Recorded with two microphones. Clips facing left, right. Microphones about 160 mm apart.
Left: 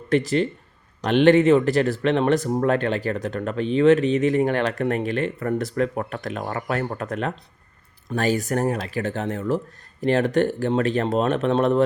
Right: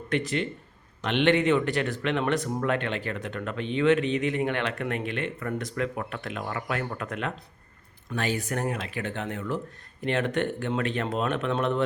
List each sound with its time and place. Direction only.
0.1 s speech: 35° left (ahead or behind)